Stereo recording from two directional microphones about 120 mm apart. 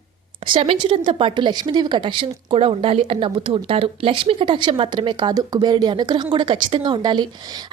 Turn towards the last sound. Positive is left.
turn(degrees=-35)  # may be behind; listen again after turning